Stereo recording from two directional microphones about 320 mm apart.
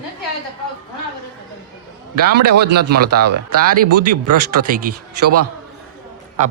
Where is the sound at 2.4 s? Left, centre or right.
Right.